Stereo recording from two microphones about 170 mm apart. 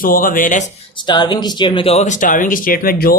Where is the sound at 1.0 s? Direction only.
25° left (ahead or behind).